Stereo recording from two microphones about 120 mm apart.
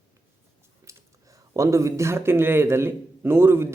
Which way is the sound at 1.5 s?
25° right (ahead or behind).